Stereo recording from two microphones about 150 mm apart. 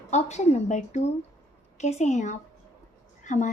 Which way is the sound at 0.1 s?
50° left (ahead or behind).